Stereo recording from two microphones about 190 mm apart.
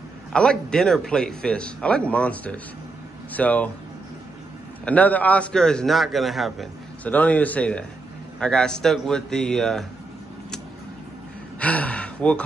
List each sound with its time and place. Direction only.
0.3 s a man's voice: 5° left (ahead or behind)
4.8 s a man's voice: 5° left (ahead or behind)
11.6 s gasp: 5° left (ahead or behind)